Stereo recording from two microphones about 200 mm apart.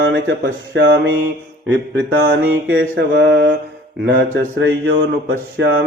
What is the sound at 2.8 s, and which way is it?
Mantra, 60° right (ahead or behind).